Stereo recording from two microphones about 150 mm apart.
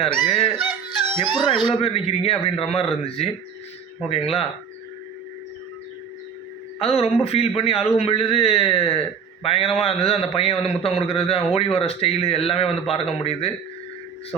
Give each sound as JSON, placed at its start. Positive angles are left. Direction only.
{"t": 0.1, "sound": "honk", "side_deg": 5}
{"t": 1.8, "sound": "a man's voice", "side_deg": 40}
{"t": 6.7, "sound": "a man's voice", "side_deg": 40}